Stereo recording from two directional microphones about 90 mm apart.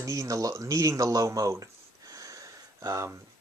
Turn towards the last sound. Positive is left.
turn(degrees=-35)  # may be behind; listen again after turning